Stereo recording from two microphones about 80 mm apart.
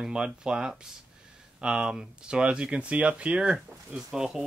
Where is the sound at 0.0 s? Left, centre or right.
Centre.